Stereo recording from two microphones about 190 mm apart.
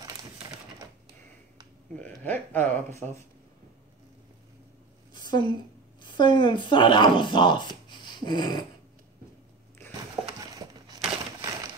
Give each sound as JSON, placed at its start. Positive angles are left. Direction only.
{"t": 2.0, "sound": "speech", "side_deg": 10}
{"t": 5.1, "sound": "a sound", "side_deg": 20}
{"t": 6.0, "sound": "speech", "side_deg": 25}
{"t": 7.9, "sound": "dog", "side_deg": 25}
{"t": 10.4, "sound": "a sound", "side_deg": -20}
{"t": 11.4, "sound": "crushing", "side_deg": -20}